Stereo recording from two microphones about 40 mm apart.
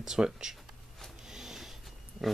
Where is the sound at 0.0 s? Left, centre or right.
Centre.